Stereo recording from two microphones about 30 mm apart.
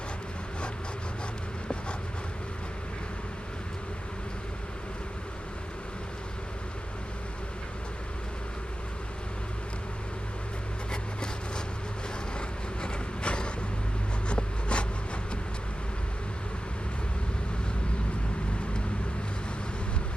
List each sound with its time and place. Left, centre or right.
10.9 s a sound: left
12.4 s vehicle: left
14.3 s writing: left